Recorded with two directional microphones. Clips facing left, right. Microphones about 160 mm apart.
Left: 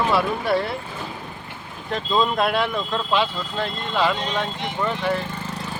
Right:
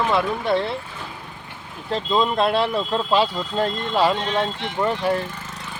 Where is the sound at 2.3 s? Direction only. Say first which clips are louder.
Right 2 dB; 25° right (ahead or behind).